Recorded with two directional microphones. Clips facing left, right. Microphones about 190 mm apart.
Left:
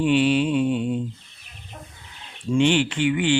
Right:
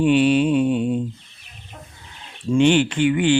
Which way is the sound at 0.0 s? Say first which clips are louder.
Right 3 dB; 45° right (ahead or behind).